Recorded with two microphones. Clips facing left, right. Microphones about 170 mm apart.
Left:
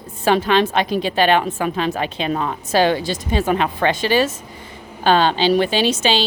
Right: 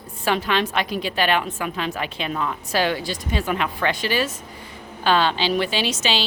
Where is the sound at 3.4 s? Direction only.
40° left (ahead or behind).